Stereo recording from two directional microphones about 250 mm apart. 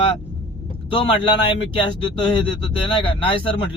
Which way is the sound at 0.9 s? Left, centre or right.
Centre.